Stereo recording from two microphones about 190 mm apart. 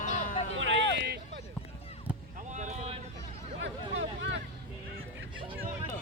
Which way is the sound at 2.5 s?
40° right (ahead or behind).